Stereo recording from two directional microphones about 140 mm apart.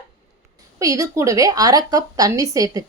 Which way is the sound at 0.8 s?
25° right (ahead or behind).